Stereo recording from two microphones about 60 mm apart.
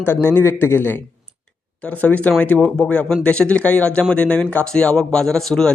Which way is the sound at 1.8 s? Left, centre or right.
Left.